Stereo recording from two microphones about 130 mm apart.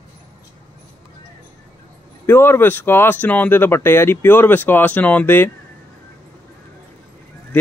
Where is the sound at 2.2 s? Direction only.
20° left (ahead or behind).